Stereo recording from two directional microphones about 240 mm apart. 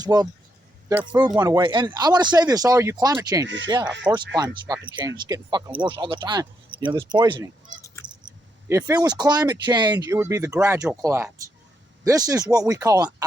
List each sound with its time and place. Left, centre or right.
0.0 s speech: centre
3.4 s speech: right
3.7 s speech: centre
8.7 s speech: centre